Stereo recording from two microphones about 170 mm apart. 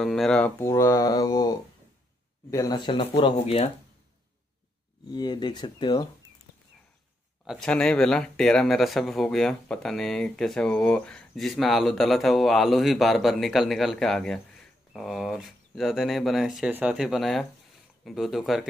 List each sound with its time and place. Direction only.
0.0 s speech: centre (ahead or behind); by 3.7 s 35° left (ahead or behind)
5.1 s speech: 25° left (ahead or behind)
7.4 s speech: 5° left (ahead or behind)